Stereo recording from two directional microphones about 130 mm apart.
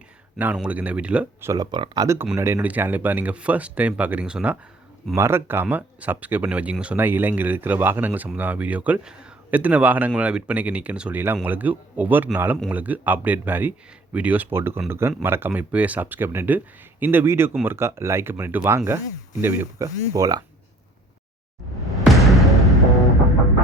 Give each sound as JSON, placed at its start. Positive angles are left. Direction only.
{"t": 0.3, "sound": "speech", "side_deg": -10}
{"t": 1.5, "sound": "speech", "side_deg": -35}
{"t": 2.3, "sound": "speech", "side_deg": -20}
{"t": 5.1, "sound": "speech", "side_deg": -20}
{"t": 21.9, "sound": "music", "side_deg": 0}